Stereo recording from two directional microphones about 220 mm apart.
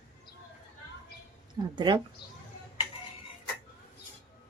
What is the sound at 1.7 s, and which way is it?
Speech, 20° right (ahead or behind).